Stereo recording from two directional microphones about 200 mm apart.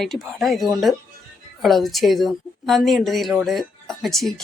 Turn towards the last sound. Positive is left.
turn(degrees=0)  # may be behind; listen again after turning